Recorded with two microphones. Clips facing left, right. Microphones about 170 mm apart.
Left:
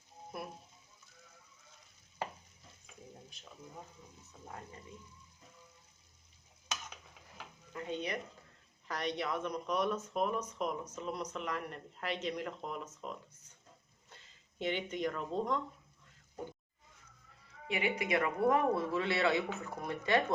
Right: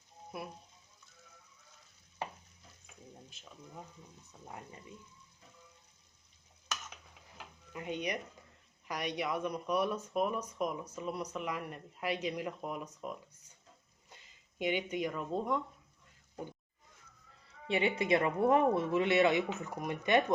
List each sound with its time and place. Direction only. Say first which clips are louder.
7.7 s speech: right 1 dB; 15° right (ahead or behind)
14.6 s speech: right 2 dB; 10° right (ahead or behind)
17.7 s speech: right 4 dB; 30° right (ahead or behind)